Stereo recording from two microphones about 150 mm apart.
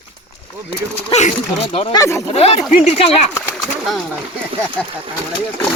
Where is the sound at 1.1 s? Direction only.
45° left (ahead or behind).